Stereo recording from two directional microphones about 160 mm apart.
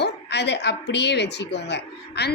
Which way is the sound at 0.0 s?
90° left.